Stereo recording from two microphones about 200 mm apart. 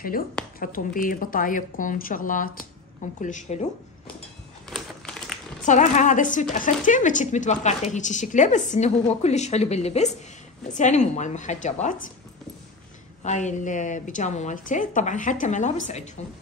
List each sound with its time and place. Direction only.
0.6 s speech: 45° left (ahead or behind)
4.6 s crumpling: centre (ahead or behind)
5.7 s speech: 40° left (ahead or behind)
13.2 s speech: 35° left (ahead or behind)